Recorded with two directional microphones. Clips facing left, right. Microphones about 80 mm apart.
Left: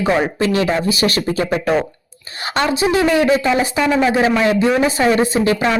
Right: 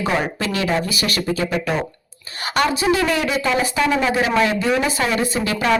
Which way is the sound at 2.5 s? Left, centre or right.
Left.